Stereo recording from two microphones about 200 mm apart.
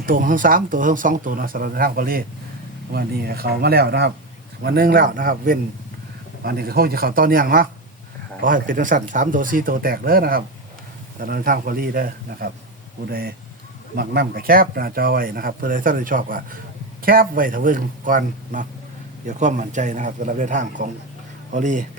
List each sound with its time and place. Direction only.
0.0 s a man's voice: 45° right (ahead or behind)